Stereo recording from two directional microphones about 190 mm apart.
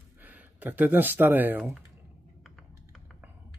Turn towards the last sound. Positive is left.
turn(degrees=0)  # may be behind; listen again after turning